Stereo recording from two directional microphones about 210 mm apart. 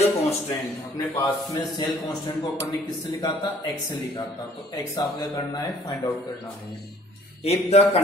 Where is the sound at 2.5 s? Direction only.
15° left (ahead or behind).